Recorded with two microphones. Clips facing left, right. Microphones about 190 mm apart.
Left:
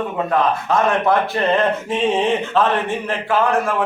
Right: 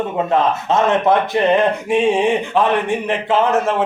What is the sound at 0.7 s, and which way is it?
Speech, 20° right (ahead or behind).